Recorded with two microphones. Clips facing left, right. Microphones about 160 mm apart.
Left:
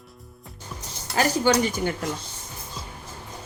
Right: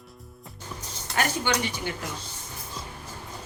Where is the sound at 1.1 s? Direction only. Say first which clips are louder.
Left 6 dB; 35° left (ahead or behind).